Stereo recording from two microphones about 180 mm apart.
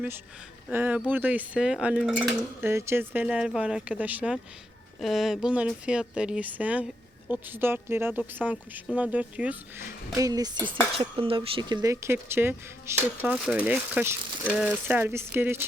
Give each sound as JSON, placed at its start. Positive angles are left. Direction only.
{"t": 0.7, "sound": "speech", "side_deg": -10}
{"t": 2.6, "sound": "speech", "side_deg": -15}
{"t": 10.2, "sound": "dishes", "side_deg": -20}
{"t": 10.9, "sound": "speech", "side_deg": -30}